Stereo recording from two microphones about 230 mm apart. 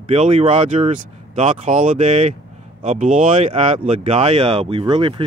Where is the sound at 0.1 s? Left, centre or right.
Right.